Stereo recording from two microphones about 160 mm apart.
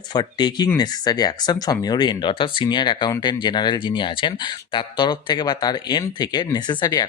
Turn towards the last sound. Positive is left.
turn(degrees=25)  # may be behind; listen again after turning